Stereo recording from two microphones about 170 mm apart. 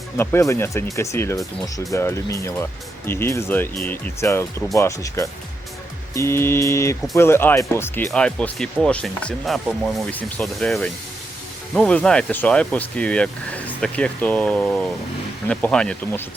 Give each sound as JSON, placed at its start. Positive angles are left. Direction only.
{"t": 0.2, "sound": "speech", "side_deg": 15}